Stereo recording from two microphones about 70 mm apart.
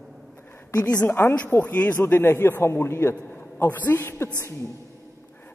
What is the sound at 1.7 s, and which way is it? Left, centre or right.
A man's voice, left.